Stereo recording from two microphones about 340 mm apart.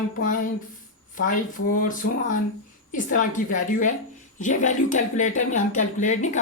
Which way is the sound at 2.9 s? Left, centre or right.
Left.